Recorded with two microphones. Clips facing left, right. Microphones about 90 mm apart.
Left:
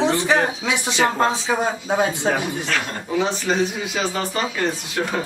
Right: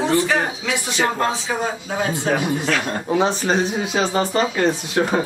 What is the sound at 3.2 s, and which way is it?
Speech, 35° right (ahead or behind).